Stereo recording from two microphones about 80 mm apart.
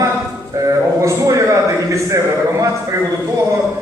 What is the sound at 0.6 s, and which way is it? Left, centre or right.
Speech, right.